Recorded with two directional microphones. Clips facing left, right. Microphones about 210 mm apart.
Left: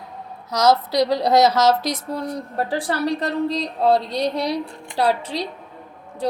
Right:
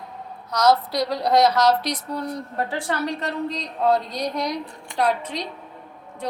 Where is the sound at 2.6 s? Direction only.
35° left (ahead or behind).